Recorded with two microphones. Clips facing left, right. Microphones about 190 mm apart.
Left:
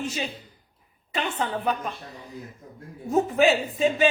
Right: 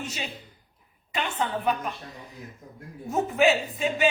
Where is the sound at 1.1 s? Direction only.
35° left (ahead or behind).